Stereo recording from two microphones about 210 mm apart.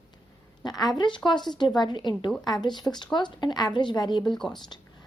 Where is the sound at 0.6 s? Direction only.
20° left (ahead or behind).